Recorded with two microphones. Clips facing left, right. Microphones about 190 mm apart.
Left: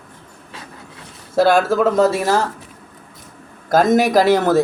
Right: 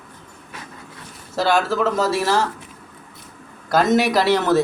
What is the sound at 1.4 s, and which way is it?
Speech, 55° left (ahead or behind).